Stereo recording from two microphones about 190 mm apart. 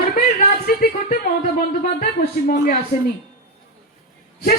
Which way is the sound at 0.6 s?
50° left (ahead or behind).